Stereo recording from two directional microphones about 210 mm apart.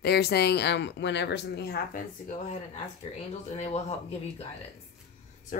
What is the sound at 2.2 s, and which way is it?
Speech, 35° left (ahead or behind).